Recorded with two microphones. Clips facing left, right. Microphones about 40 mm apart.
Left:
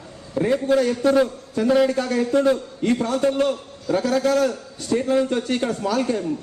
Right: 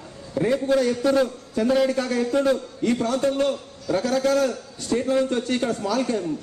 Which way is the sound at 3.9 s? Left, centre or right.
Left.